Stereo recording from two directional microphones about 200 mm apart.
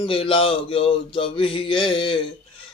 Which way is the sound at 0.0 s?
25° left (ahead or behind).